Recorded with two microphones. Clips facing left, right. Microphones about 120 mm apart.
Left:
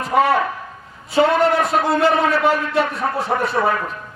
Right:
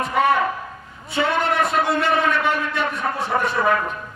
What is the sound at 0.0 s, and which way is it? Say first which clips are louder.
A man's voice: left 2 dB; 35° left (ahead or behind).